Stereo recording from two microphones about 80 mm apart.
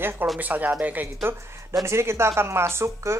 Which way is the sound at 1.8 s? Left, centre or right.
Right.